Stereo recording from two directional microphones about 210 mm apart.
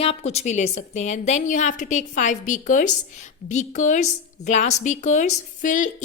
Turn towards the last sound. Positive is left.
turn(degrees=35)  # may be behind; listen again after turning